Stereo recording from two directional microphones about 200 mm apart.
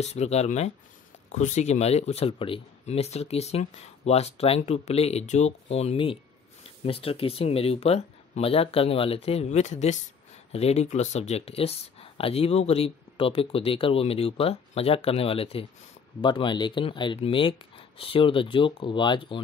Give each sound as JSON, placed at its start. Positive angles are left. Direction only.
{"t": 0.0, "sound": "speech", "side_deg": 35}